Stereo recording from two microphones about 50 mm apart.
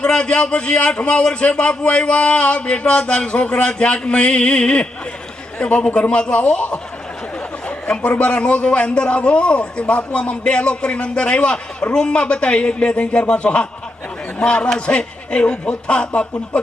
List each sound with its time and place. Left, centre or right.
0.0 s a man's voice: left
7.9 s a man's voice: left